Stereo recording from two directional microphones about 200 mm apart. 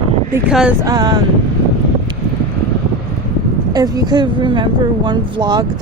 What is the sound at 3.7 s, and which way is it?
A woman's voice, 20° right (ahead or behind).